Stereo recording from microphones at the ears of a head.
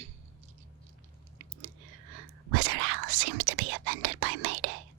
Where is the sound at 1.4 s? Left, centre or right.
Right.